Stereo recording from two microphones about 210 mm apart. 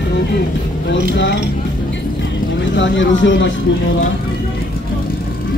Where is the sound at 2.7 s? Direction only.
60° left (ahead or behind).